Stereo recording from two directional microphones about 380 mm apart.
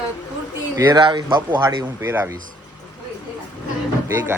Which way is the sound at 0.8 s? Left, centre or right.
Centre.